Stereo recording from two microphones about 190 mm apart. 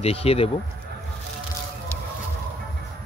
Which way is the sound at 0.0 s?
30° left (ahead or behind).